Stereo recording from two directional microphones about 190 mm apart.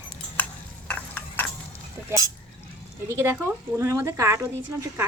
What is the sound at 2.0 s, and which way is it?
Speech, 20° right (ahead or behind).